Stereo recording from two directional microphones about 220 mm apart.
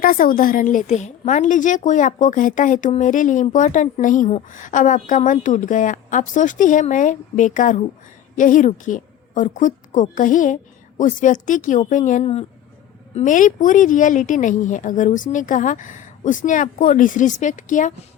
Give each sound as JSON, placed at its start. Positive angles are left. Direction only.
{"t": 0.0, "sound": "a woman's voice", "side_deg": 40}